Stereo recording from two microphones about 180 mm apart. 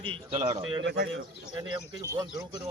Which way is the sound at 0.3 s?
40° right (ahead or behind).